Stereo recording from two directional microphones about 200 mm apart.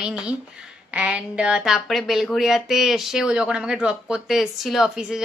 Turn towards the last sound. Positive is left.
turn(degrees=0)  # may be behind; listen again after turning